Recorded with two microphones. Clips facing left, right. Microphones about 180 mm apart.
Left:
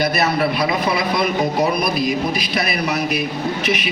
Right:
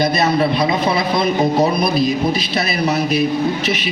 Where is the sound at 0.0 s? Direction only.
20° right (ahead or behind).